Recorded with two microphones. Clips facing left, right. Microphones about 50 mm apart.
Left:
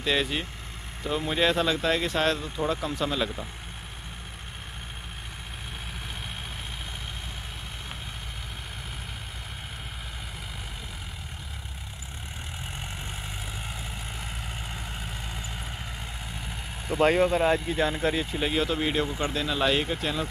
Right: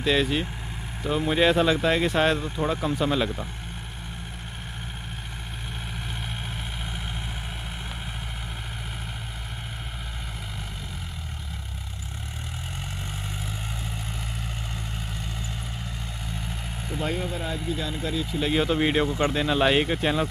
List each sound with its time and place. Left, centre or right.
0.0 s speech: centre
17.0 s speech: left
18.5 s speech: centre
18.8 s speech: right